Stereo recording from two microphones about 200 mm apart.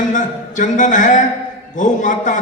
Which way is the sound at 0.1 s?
40° left (ahead or behind).